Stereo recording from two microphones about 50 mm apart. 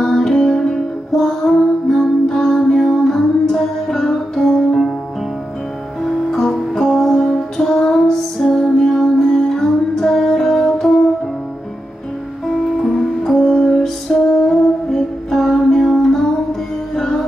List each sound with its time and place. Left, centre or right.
0.0 s music: centre
6.0 s music: centre
12.8 s music: centre